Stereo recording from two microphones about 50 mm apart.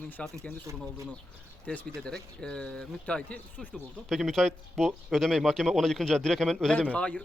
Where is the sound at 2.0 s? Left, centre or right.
Centre.